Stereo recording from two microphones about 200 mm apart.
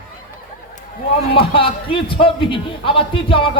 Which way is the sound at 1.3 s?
25° left (ahead or behind).